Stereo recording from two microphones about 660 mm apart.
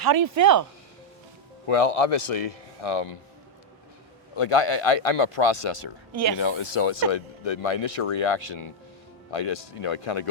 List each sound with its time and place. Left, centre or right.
0.0 s speech: right
1.6 s a man's voice: left
4.4 s speech: left